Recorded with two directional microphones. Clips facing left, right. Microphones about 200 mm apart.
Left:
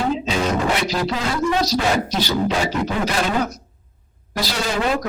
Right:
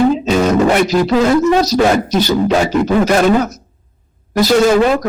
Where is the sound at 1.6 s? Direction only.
45° right (ahead or behind).